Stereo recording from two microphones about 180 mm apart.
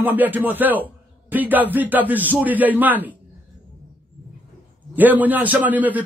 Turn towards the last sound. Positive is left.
turn(degrees=-10)  # may be behind; listen again after turning